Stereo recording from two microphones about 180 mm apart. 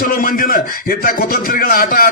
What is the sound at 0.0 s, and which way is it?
A man's voice, 50° left (ahead or behind).